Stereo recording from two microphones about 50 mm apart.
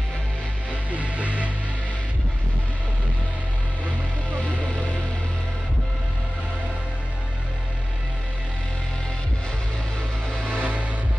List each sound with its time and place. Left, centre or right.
0.9 s music: right
10.6 s music: right